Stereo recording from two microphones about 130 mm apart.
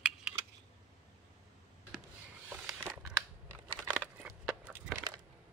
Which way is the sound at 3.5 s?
10° right (ahead or behind).